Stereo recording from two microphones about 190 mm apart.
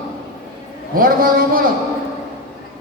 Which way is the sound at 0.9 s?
50° right (ahead or behind).